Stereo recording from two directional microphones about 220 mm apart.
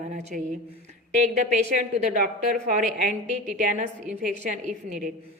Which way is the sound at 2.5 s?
35° right (ahead or behind).